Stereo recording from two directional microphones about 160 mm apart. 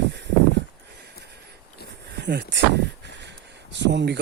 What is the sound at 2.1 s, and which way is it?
Speech, 90° right.